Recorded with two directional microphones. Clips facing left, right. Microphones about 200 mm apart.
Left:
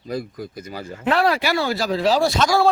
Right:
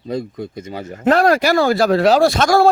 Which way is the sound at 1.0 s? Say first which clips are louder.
Right 6 dB; 45° right (ahead or behind).